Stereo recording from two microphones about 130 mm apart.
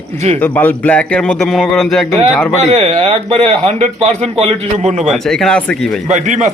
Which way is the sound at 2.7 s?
50° right (ahead or behind).